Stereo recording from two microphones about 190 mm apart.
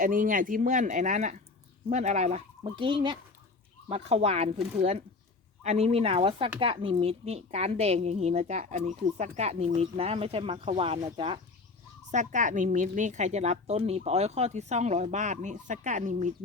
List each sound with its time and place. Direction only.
0.0 s a woman's voice: 45° right (ahead or behind); by 11.3 s 30° right (ahead or behind)
12.1 s a woman's voice: 40° right (ahead or behind)